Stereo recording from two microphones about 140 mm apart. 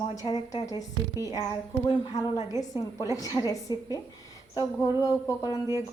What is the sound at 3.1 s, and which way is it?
A woman's voice, 25° left (ahead or behind).